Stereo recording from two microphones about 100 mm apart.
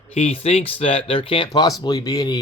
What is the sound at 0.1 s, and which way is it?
Speech, 85° left.